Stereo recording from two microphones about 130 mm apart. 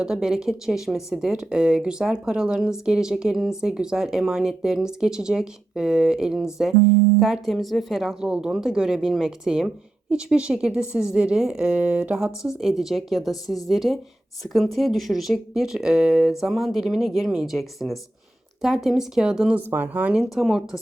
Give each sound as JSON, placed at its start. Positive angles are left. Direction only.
{"t": 0.0, "sound": "a woman's voice", "side_deg": -5}